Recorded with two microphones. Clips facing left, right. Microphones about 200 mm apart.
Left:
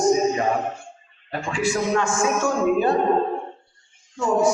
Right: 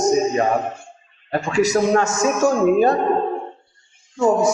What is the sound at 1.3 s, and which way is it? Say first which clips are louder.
A man's voice: right 6 dB; 40° right (ahead or behind).